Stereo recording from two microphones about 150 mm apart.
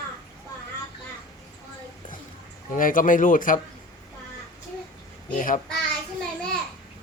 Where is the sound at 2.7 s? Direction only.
65° left (ahead or behind).